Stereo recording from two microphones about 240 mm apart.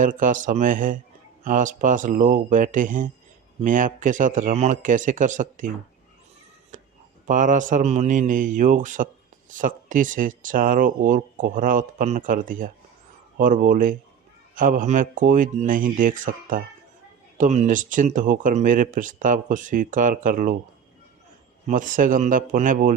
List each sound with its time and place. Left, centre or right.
0.0 s speech: right
6.7 s a sound: right
7.3 s speech: right
21.7 s speech: right